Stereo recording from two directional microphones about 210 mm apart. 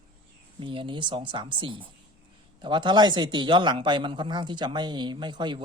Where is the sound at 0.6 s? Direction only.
25° right (ahead or behind).